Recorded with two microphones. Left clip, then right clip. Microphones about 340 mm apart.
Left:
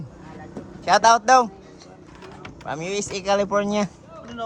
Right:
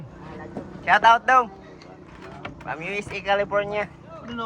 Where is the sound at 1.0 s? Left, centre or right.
Centre.